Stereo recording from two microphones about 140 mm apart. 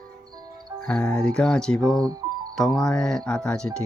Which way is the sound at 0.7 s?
5° left (ahead or behind).